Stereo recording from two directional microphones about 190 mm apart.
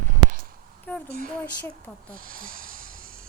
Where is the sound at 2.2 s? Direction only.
45° right (ahead or behind).